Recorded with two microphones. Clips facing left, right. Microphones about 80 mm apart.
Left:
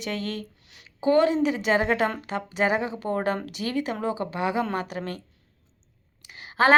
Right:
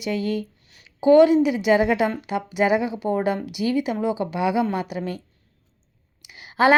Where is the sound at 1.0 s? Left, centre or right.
Left.